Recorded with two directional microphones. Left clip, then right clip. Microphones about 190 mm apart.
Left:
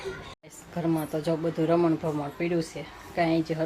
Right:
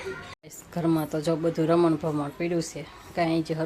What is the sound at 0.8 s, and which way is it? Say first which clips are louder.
Speech: right 2 dB; 20° right (ahead or behind).